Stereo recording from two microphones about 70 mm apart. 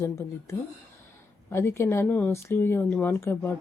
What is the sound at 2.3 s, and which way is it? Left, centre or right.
Speech, left.